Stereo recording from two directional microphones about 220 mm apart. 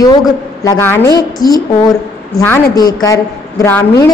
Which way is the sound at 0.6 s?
15° left (ahead or behind).